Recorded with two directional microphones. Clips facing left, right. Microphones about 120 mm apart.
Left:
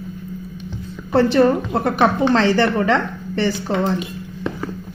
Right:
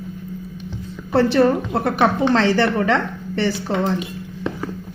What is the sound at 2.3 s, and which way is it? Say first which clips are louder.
Speech: left 1 dB; 40° left (ahead or behind).